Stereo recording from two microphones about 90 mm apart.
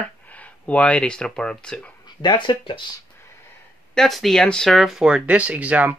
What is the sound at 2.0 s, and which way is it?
Speech, 55° left (ahead or behind).